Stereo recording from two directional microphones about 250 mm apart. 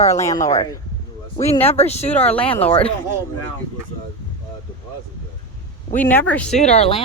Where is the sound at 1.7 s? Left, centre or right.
Left.